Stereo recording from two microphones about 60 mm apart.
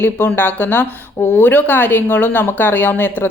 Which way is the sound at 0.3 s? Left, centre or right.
Left.